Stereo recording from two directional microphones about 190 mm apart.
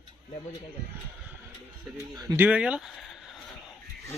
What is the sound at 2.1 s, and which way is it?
Speech, 20° right (ahead or behind).